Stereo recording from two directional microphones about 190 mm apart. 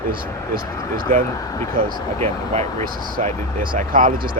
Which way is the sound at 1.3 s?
20° left (ahead or behind).